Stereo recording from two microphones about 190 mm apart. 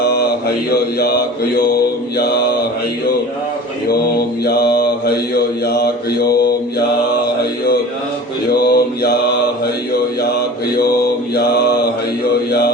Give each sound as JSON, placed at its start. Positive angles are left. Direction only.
{"t": 0.7, "sound": "mantra", "side_deg": 55}
{"t": 4.4, "sound": "mantra", "side_deg": 55}
{"t": 8.6, "sound": "mantra", "side_deg": 55}
{"t": 11.3, "sound": "mantra", "side_deg": 55}